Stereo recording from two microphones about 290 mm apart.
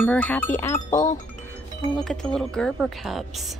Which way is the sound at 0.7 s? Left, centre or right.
Left.